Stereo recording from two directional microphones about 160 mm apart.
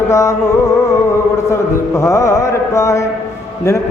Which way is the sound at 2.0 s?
20° left (ahead or behind).